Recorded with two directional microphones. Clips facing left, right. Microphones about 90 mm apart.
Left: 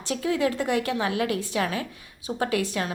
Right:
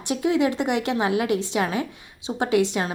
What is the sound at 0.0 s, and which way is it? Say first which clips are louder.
A woman's voice: right 3 dB; 20° right (ahead or behind).